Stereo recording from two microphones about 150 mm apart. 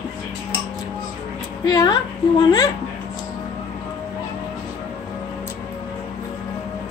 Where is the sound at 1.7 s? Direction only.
25° left (ahead or behind).